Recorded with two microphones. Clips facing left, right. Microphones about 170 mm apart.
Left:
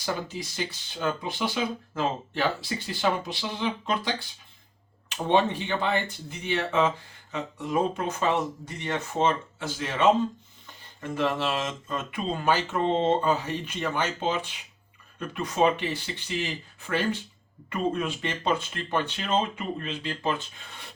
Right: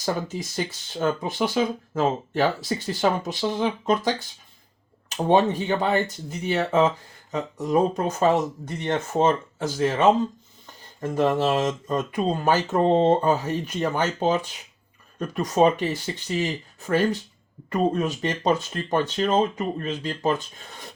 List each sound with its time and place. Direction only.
0.0 s speech: 45° right (ahead or behind)